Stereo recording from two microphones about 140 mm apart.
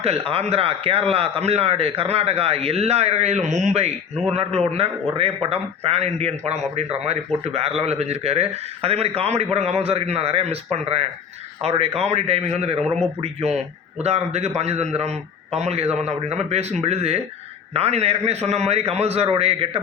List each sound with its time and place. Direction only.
0.0 s a man's voice: 45° right (ahead or behind)